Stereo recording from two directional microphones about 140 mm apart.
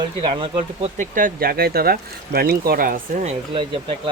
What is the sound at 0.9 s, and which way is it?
Speech, 75° right (ahead or behind).